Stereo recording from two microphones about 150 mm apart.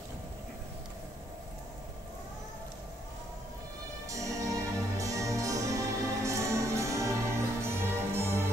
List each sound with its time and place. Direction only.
4.1 s music: 20° right (ahead or behind)